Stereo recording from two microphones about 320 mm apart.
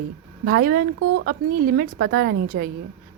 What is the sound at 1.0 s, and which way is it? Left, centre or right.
Speech, right.